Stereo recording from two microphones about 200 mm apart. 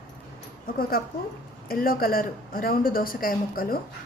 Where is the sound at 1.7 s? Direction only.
45° left (ahead or behind).